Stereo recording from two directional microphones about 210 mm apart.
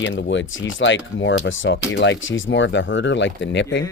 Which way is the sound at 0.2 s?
60° left (ahead or behind).